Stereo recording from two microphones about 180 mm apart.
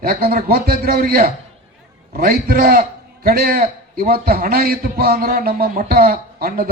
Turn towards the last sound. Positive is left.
turn(degrees=-55)  # may be behind; listen again after turning